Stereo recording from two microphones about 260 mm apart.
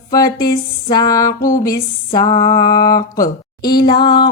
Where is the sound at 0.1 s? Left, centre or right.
Centre.